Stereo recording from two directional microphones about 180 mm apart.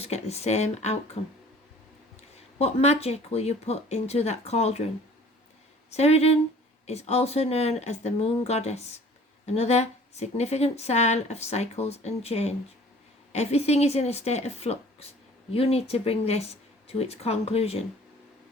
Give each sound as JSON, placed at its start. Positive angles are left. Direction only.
{"t": 0.0, "sound": "speech", "side_deg": 35}
{"t": 2.6, "sound": "speech", "side_deg": 35}
{"t": 5.9, "sound": "speech", "side_deg": 35}